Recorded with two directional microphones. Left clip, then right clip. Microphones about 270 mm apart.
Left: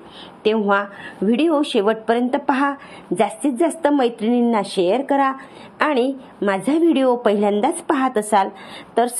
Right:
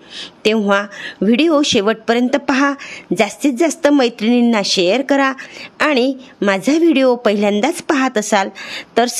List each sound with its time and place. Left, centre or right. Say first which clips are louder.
0.4 s speech: right 3 dB; right